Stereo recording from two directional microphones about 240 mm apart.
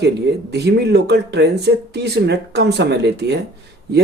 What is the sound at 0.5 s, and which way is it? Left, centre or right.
Speech, right.